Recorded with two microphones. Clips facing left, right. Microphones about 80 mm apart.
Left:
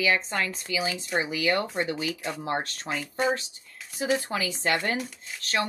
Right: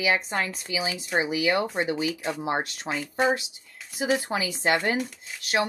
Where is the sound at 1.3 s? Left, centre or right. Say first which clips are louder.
Right 2 dB; centre.